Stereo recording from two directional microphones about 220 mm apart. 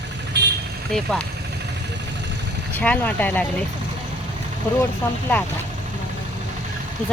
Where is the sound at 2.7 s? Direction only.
5° left (ahead or behind).